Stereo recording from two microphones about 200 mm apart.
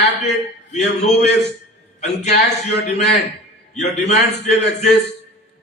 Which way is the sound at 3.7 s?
35° left (ahead or behind).